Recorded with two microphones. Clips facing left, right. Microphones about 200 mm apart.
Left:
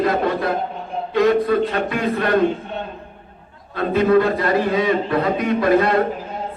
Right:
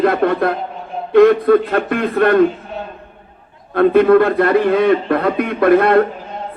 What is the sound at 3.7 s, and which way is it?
A man's voice, 55° right (ahead or behind).